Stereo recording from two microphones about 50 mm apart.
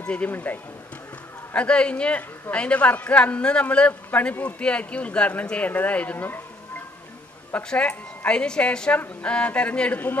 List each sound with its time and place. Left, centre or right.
0.0 s speech: left
0.3 s speech: left
1.5 s speech: left
7.5 s speech: left